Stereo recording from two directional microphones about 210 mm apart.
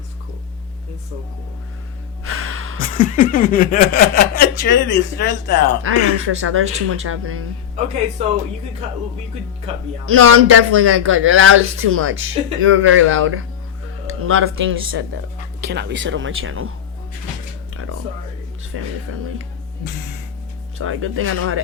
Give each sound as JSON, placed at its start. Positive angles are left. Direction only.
{"t": 2.2, "sound": "gasp", "side_deg": -85}
{"t": 2.7, "sound": "a sound", "side_deg": 40}
{"t": 5.8, "sound": "speech", "side_deg": -75}
{"t": 8.2, "sound": "speech", "side_deg": -30}
{"t": 10.1, "sound": "speech", "side_deg": -85}
{"t": 14.1, "sound": "speech", "side_deg": -85}
{"t": 15.6, "sound": "speech", "side_deg": -55}
{"t": 18.7, "sound": "speech", "side_deg": -90}
{"t": 20.7, "sound": "speech", "side_deg": -85}